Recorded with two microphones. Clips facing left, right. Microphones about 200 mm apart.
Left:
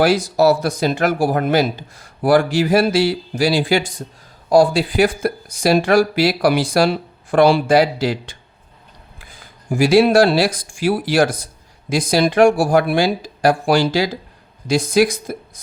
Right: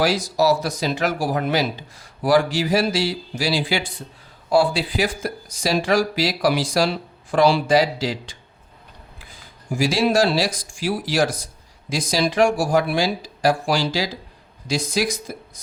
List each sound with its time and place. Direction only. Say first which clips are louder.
0.0 s speech: left 5 dB; 55° left (ahead or behind)